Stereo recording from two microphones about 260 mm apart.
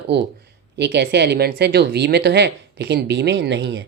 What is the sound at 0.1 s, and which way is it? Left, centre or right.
Speech, right.